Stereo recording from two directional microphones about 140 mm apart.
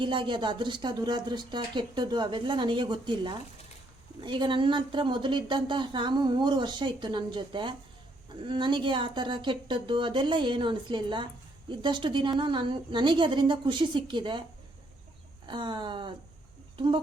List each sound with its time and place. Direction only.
0.0 s speech: 35° right (ahead or behind)
15.4 s speech: 35° right (ahead or behind)